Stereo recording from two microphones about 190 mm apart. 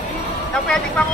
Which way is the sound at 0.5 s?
5° left (ahead or behind).